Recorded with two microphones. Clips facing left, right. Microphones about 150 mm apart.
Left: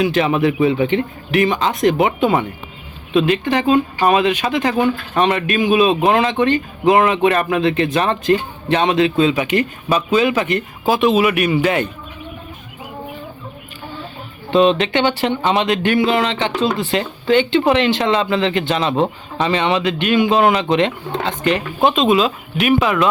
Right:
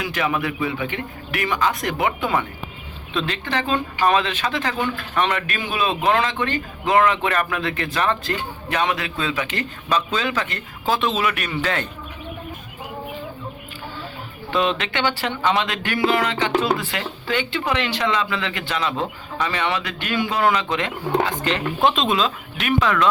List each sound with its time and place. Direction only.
0.0 s speech: 25° left (ahead or behind)
14.5 s speech: 25° left (ahead or behind)
21.8 s speech: 5° left (ahead or behind)